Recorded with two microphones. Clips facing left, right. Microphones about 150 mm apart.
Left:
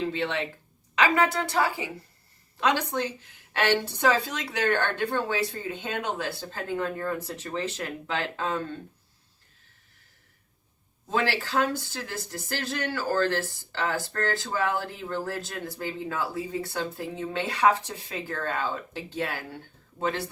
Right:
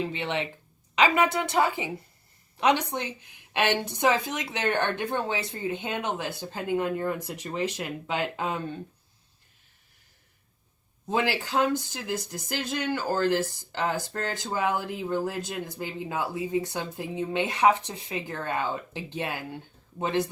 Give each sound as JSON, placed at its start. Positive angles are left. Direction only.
{"t": 0.0, "sound": "a woman's voice", "side_deg": -20}
{"t": 11.1, "sound": "speech", "side_deg": -20}